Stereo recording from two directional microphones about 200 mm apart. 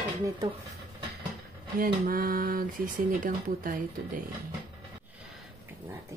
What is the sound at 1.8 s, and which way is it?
Speech, 45° right (ahead or behind).